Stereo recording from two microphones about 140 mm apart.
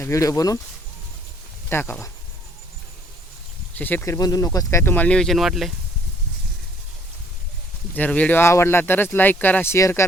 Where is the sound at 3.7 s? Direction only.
15° left (ahead or behind).